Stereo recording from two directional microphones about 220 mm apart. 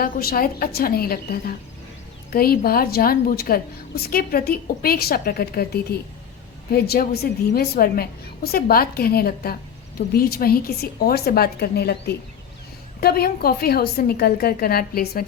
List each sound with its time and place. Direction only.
0.0 s a woman's voice: 45° left (ahead or behind)